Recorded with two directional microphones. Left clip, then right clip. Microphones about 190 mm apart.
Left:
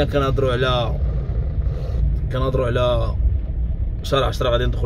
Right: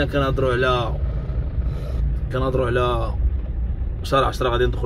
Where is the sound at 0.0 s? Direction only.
15° left (ahead or behind).